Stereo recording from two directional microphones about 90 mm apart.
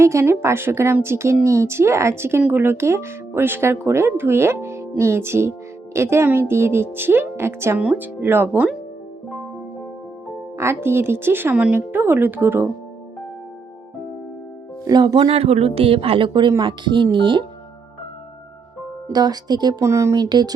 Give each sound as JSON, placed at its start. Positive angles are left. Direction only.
{"t": 0.0, "sound": "speech", "side_deg": -30}
{"t": 7.8, "sound": "speech", "side_deg": -15}
{"t": 10.6, "sound": "speech", "side_deg": -30}
{"t": 14.8, "sound": "speech", "side_deg": -50}
{"t": 19.1, "sound": "speech", "side_deg": -45}
{"t": 19.8, "sound": "speech", "side_deg": -35}
{"t": 20.1, "sound": "speech", "side_deg": -50}